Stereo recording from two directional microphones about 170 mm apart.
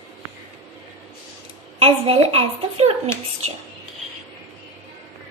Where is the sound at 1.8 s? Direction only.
35° right (ahead or behind).